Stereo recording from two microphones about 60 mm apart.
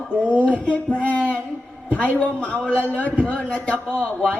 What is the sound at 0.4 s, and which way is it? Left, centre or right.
Speech, left.